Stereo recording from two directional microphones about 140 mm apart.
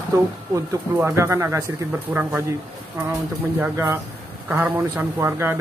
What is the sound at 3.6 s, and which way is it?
A man's voice, 15° right (ahead or behind).